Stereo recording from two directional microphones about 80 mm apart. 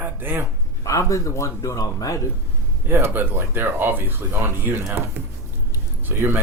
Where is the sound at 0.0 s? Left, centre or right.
Right.